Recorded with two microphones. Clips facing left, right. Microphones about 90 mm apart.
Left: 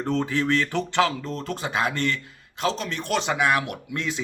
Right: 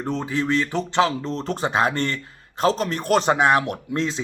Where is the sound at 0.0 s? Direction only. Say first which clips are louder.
Even; 15° right (ahead or behind).